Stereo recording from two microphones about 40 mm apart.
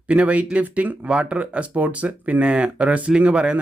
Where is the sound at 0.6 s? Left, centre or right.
Right.